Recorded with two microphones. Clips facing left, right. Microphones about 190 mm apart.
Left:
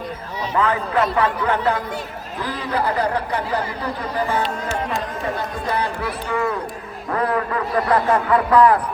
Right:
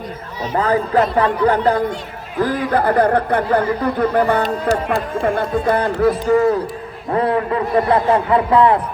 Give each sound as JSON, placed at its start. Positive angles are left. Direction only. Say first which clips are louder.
{"t": 0.5, "sound": "speech", "louder": "right 4 dB", "side_deg": -40}
{"t": 2.4, "sound": "speech", "louder": "right 7 dB", "side_deg": -50}
{"t": 6.2, "sound": "speech", "louder": "right 6 dB", "side_deg": -40}
{"t": 7.1, "sound": "a man's voice", "louder": "right 4 dB", "side_deg": -25}